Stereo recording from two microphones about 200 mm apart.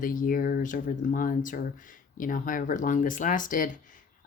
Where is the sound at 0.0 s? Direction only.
45° left (ahead or behind).